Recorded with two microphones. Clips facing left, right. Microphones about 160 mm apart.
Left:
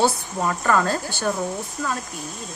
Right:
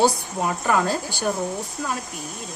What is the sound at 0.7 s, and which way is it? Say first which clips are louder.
Speech: left 1 dB; 10° right (ahead or behind).